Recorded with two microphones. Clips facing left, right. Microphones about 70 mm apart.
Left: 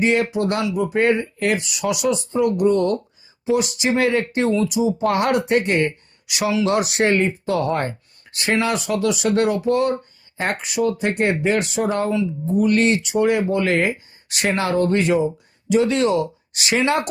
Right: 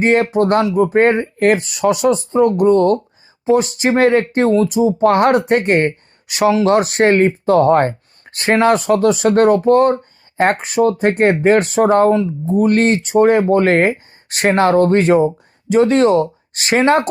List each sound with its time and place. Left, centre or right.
0.0 s speech: right